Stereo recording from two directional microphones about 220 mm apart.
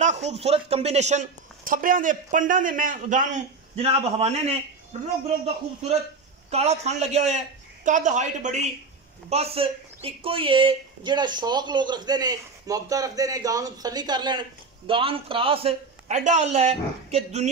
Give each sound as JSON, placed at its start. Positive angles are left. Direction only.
{"t": 0.0, "sound": "a man's voice", "side_deg": -30}
{"t": 6.5, "sound": "a man's voice", "side_deg": -30}